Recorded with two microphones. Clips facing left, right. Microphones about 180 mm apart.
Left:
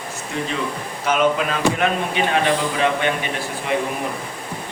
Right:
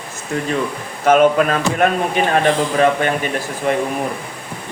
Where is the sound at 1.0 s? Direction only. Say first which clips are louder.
Right 7 dB; 50° right (ahead or behind).